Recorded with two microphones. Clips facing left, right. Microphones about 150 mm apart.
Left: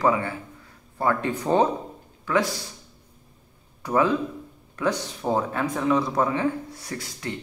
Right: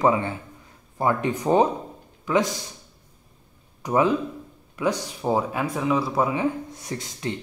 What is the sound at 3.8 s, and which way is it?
Speech, 15° right (ahead or behind).